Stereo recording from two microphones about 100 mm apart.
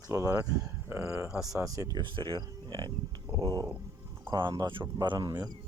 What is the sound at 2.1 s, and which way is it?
Speech, 55° right (ahead or behind).